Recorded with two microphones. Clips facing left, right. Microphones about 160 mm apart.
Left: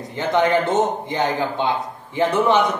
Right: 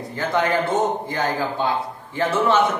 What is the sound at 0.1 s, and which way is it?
A man's voice, 20° left (ahead or behind).